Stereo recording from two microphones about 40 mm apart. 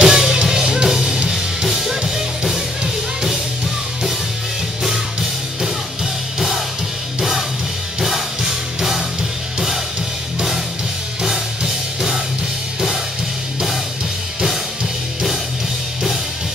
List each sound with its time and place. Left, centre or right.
0.0 s music: centre
7.2 s music: centre
11.2 s music: centre